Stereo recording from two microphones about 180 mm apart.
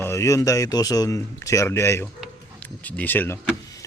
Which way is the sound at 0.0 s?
15° left (ahead or behind).